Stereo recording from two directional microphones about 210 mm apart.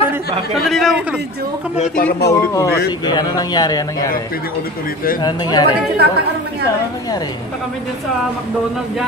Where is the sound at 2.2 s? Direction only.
15° left (ahead or behind).